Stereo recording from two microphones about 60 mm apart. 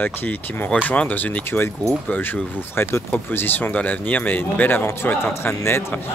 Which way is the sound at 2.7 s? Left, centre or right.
Left.